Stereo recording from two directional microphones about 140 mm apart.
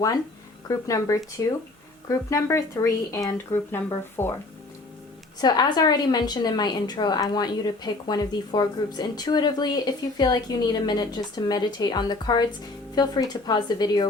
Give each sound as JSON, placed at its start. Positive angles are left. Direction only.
{"t": 0.7, "sound": "a woman's voice", "side_deg": 25}
{"t": 5.4, "sound": "a woman's voice", "side_deg": 30}